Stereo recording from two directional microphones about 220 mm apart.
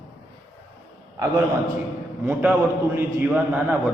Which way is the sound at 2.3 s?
5° right (ahead or behind).